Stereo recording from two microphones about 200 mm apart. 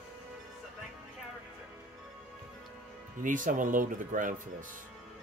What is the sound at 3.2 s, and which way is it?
Speech, 40° right (ahead or behind).